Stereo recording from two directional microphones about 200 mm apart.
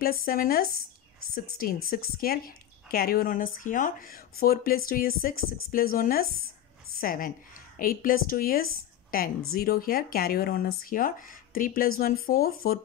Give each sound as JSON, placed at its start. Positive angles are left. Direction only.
{"t": 0.0, "sound": "speech", "side_deg": 50}